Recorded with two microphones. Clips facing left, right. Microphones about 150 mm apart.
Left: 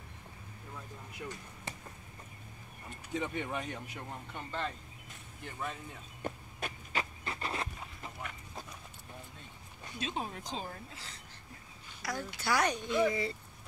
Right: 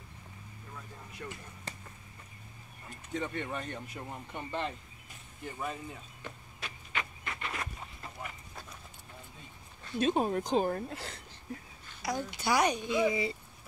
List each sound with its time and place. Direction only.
3.1 s speech: 5° left (ahead or behind)
4.3 s speech: 15° right (ahead or behind)
5.4 s speech: 5° right (ahead or behind)
6.2 s a sound: 40° left (ahead or behind)
9.9 s speech: 50° right (ahead or behind)
12.0 s speech: 20° right (ahead or behind)